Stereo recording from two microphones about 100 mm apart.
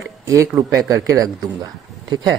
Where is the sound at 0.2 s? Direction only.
30° right (ahead or behind).